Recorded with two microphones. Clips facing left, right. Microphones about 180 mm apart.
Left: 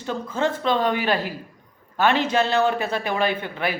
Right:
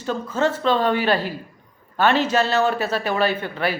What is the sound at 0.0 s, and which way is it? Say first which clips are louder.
A man's voice: right 2 dB; 15° left (ahead or behind).